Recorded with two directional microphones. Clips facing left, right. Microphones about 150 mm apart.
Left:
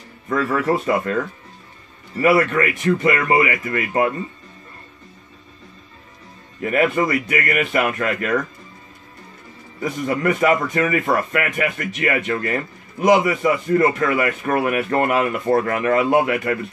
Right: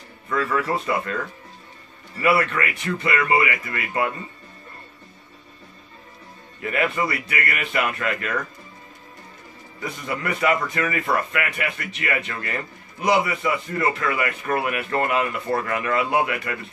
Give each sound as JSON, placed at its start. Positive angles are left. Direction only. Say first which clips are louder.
{"t": 0.3, "sound": "a man's voice", "louder": "left 4 dB", "side_deg": 45}
{"t": 2.2, "sound": "a man's voice", "louder": "left 5 dB", "side_deg": 45}
{"t": 6.6, "sound": "a man's voice", "louder": "left 5 dB", "side_deg": 40}
{"t": 9.8, "sound": "a man's voice", "louder": "left 7 dB", "side_deg": 45}